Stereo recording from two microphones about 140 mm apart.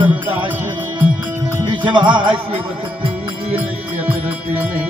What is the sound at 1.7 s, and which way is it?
Music, 35° right (ahead or behind).